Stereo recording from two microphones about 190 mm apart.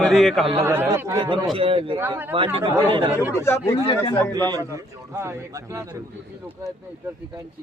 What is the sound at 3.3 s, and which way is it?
A man's voice, 15° left (ahead or behind).